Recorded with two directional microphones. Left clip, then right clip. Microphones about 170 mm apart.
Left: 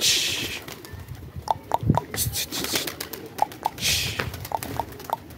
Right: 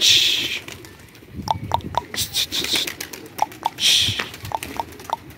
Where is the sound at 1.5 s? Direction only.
20° left (ahead or behind).